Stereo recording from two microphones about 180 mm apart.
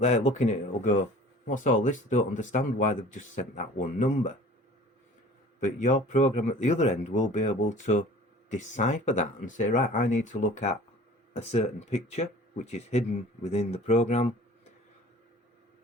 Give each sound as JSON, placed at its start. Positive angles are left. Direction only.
{"t": 0.0, "sound": "speech", "side_deg": 40}
{"t": 5.5, "sound": "speech", "side_deg": 40}